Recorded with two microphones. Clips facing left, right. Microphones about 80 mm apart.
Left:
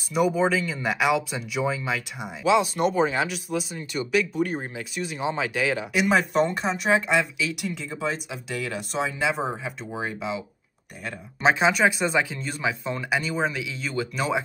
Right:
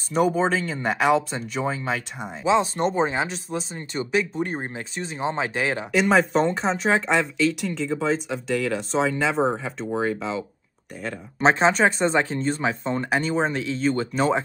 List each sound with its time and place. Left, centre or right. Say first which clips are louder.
0.3 s speech: right 1 dB; right
5.9 s speech: right 6 dB; centre
11.4 s speech: right 2 dB; right